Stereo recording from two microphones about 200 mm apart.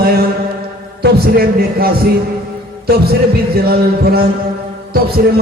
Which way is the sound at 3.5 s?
50° right (ahead or behind).